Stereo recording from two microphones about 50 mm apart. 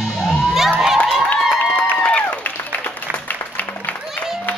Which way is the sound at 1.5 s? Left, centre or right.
Left.